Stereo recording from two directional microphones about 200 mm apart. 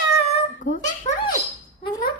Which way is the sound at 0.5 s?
40° left (ahead or behind).